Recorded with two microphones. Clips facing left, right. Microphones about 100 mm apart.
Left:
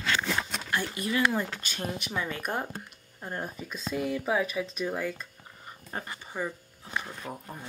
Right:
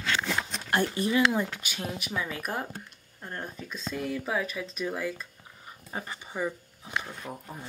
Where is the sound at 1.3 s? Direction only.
10° right (ahead or behind).